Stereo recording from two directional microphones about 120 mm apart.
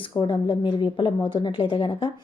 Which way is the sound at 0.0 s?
45° left (ahead or behind).